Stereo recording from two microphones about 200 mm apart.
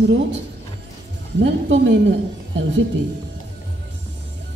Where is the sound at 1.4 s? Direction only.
60° right (ahead or behind).